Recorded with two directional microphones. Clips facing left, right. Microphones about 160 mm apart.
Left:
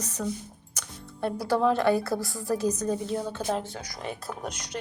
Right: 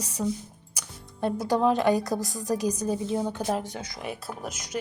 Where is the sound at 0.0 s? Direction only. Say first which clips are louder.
Right 2 dB; 10° right (ahead or behind).